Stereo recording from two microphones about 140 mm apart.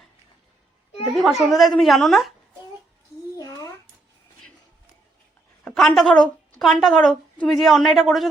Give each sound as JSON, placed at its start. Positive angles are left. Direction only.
{"t": 1.1, "sound": "a woman's voice", "side_deg": 0}
{"t": 3.3, "sound": "a sound", "side_deg": 25}
{"t": 5.6, "sound": "a woman's voice", "side_deg": 5}